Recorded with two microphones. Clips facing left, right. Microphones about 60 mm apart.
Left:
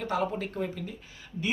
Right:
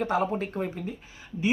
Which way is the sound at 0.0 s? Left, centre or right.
Right.